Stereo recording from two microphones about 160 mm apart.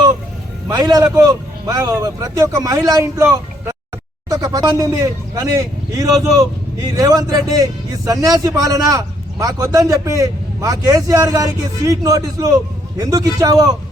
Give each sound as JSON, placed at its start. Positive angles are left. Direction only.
{"t": 0.7, "sound": "a man's voice", "side_deg": -25}